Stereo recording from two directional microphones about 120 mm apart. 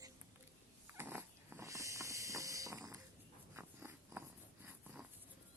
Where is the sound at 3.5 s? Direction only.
20° right (ahead or behind).